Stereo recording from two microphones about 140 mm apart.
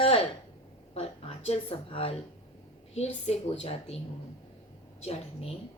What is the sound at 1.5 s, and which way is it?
A woman's voice, 40° left (ahead or behind).